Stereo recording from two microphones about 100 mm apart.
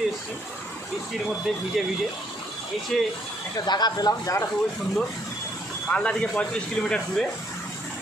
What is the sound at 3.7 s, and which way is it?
Speech, 40° left (ahead or behind).